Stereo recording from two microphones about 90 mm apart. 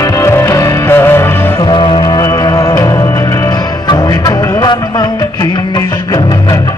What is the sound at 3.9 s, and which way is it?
Music, 50° left (ahead or behind).